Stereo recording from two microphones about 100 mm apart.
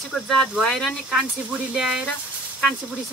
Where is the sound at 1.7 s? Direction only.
5° right (ahead or behind).